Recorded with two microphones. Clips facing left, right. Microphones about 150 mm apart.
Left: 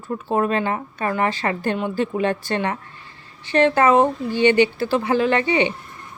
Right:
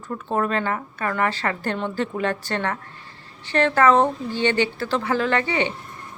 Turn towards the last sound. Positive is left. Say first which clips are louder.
# left 3 dB
turn(degrees=15)  # may be behind; listen again after turning